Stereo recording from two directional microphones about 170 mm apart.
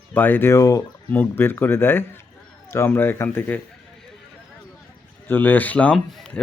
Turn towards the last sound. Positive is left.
turn(degrees=5)  # may be behind; listen again after turning